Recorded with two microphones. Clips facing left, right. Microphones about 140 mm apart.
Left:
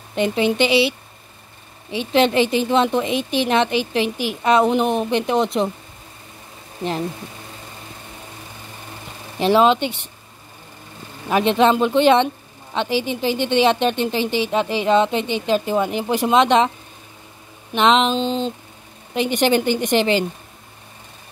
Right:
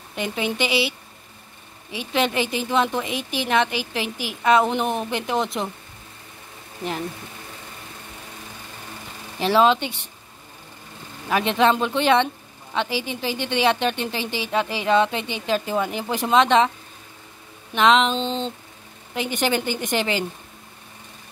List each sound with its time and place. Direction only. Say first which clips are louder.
0.1 s a woman's voice: left 7 dB; 25° left (ahead or behind)
9.4 s a woman's voice: left 3 dB; 20° left (ahead or behind)
11.2 s a woman's voice: left 3 dB; 20° left (ahead or behind)
17.7 s a woman's voice: left 1 dB; 20° left (ahead or behind)
18.1 s a sound: left 4 dB; 5° left (ahead or behind)
19.1 s a woman's voice: left 6 dB; 20° left (ahead or behind)